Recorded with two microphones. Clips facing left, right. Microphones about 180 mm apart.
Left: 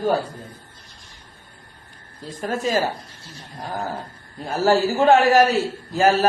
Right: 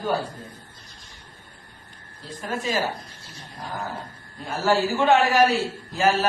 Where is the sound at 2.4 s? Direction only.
45° left (ahead or behind).